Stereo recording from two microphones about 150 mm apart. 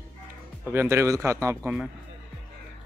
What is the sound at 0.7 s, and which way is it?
Speech, 15° right (ahead or behind).